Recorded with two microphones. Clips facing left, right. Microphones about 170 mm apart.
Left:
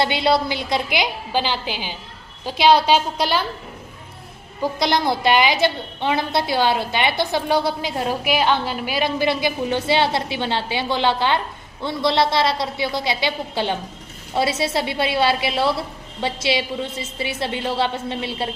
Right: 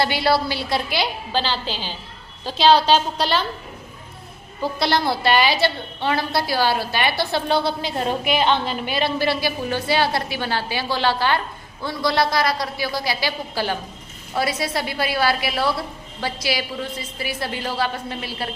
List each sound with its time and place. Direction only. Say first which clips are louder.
0.0 s a woman's voice: left 1 dB; 20° left (ahead or behind)
4.6 s a woman's voice: left 1 dB; 15° left (ahead or behind)